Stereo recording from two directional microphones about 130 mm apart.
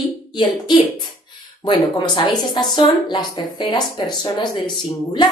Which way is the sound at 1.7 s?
35° left (ahead or behind).